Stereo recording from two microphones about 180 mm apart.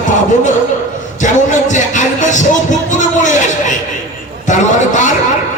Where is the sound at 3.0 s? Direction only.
45° left (ahead or behind).